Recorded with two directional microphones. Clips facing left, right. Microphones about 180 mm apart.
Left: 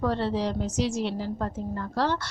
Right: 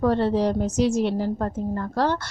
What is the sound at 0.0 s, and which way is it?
A woman's voice, 50° right (ahead or behind).